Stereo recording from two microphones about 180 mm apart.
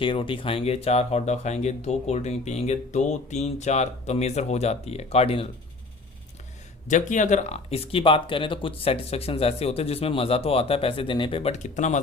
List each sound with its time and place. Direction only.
0.0 s speech: 30° left (ahead or behind)
6.8 s speech: 45° left (ahead or behind)